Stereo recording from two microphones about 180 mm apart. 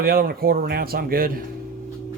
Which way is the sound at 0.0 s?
60° right (ahead or behind).